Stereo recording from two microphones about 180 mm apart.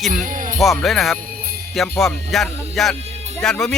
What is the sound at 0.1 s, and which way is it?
Speech, 45° right (ahead or behind).